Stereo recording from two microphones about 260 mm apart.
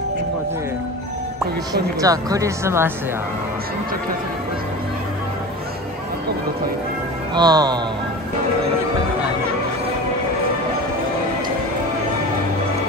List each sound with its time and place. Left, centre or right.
2.0 s speech: centre
7.3 s speech: centre